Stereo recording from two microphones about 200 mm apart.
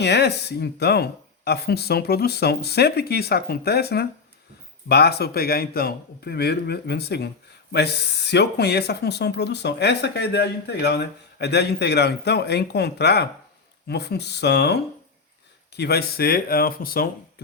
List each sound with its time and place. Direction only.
0.0 s speech: 55° left (ahead or behind)